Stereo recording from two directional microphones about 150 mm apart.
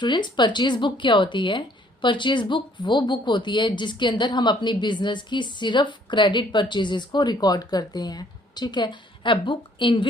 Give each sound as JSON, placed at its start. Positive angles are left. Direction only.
{"t": 0.0, "sound": "speech", "side_deg": 30}